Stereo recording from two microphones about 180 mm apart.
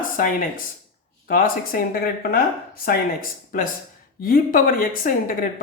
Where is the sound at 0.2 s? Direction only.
50° left (ahead or behind).